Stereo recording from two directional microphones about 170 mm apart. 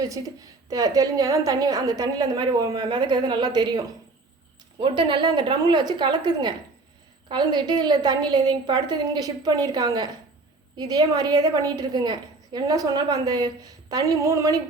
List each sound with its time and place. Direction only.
0.7 s a woman's voice: 20° right (ahead or behind)
4.8 s a woman's voice: 30° right (ahead or behind)